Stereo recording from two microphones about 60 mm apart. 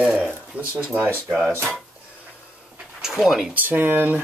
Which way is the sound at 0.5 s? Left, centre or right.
Right.